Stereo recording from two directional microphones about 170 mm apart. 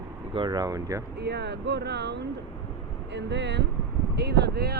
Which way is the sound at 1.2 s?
80° right.